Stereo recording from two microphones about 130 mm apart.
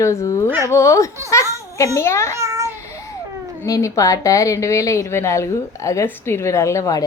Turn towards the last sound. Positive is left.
turn(degrees=25)  # may be behind; listen again after turning